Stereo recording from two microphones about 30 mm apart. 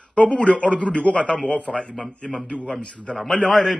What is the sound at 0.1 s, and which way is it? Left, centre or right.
A man's voice, left.